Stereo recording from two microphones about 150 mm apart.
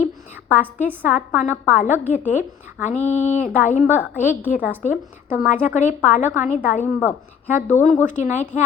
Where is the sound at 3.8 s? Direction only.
15° right (ahead or behind).